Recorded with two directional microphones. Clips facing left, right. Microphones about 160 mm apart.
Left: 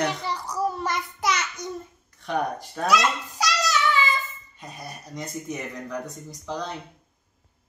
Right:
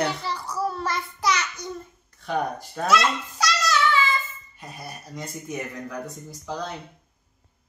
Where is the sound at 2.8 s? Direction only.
15° left (ahead or behind).